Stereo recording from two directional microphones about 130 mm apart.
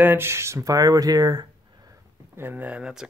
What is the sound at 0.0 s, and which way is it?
Speech, 20° right (ahead or behind).